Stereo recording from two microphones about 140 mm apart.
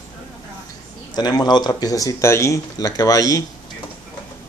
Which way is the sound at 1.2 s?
30° left (ahead or behind).